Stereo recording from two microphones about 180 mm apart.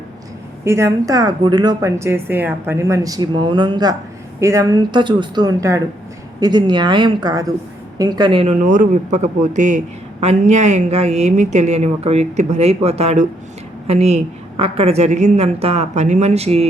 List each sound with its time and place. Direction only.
0.6 s a woman's voice: 15° right (ahead or behind); by 8.5 s 30° right (ahead or behind)
8.6 s a man's voice: 45° right (ahead or behind)